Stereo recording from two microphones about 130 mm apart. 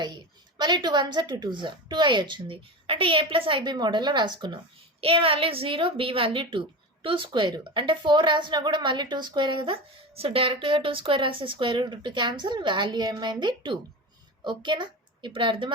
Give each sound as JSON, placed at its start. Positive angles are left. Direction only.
{"t": 0.0, "sound": "a woman's voice", "side_deg": -35}